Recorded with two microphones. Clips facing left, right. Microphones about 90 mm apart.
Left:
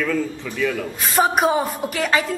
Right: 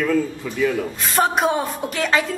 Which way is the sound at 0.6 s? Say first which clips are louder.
Right 2 dB; 15° right (ahead or behind).